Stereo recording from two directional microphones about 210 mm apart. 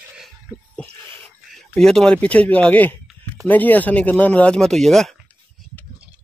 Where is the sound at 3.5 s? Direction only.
10° left (ahead or behind).